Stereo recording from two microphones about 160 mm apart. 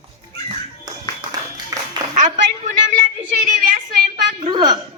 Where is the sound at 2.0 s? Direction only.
25° right (ahead or behind).